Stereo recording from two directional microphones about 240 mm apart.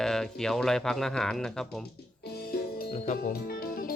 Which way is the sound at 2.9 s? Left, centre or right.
Left.